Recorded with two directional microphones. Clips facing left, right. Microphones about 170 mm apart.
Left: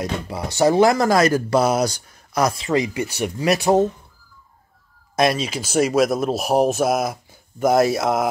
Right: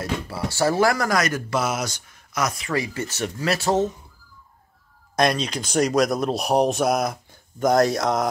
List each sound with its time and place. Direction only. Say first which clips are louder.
0.0 s speech: left 1 dB; 20° left (ahead or behind)
5.1 s speech: left 2 dB; 5° left (ahead or behind)